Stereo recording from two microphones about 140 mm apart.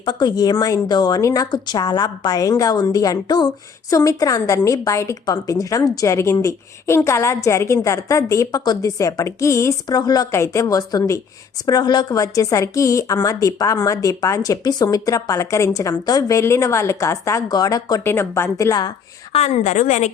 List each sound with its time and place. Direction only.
0.0 s a woman's voice: 30° left (ahead or behind)
19.3 s a woman's voice: 50° left (ahead or behind)